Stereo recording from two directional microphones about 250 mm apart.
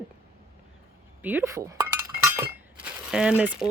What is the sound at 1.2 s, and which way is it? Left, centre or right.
Speech, centre.